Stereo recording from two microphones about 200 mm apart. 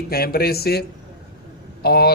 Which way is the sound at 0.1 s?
50° left (ahead or behind).